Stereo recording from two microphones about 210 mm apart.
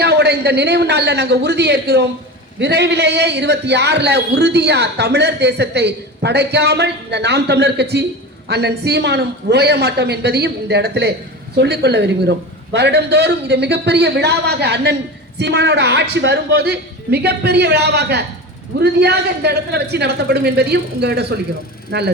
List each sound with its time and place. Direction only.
0.0 s a man's voice: 50° right (ahead or behind)